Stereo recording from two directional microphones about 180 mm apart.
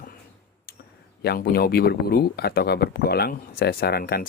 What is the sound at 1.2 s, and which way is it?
Speech, 60° left (ahead or behind).